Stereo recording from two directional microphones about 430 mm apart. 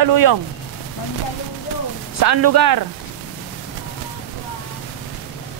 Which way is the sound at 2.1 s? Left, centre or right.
Right.